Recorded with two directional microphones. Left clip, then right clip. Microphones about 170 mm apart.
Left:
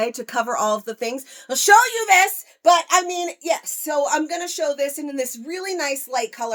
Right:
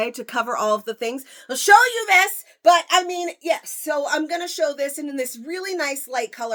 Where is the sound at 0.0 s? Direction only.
25° right (ahead or behind).